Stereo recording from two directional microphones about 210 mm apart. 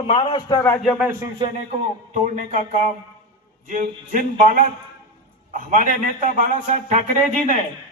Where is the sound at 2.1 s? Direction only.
35° right (ahead or behind).